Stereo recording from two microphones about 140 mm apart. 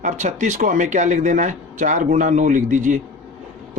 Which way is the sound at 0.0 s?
60° right (ahead or behind).